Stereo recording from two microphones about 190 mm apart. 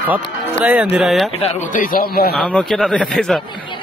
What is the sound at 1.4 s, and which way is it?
Speech, 45° left (ahead or behind).